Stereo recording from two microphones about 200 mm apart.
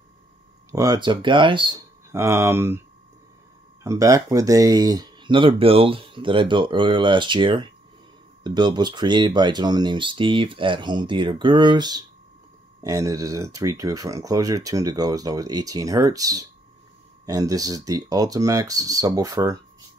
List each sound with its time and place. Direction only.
0.7 s speech: 15° right (ahead or behind)
2.1 s speech: 15° right (ahead or behind)
3.8 s speech: 15° right (ahead or behind)